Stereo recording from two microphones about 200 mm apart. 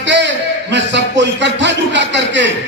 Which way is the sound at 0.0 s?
60° right (ahead or behind).